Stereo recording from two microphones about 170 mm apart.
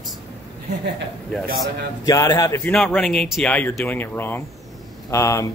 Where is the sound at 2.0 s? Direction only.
20° left (ahead or behind).